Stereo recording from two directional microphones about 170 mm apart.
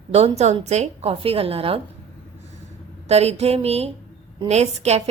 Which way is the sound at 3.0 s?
40° right (ahead or behind).